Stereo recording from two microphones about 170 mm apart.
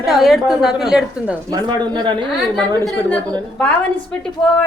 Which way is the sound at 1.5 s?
25° right (ahead or behind).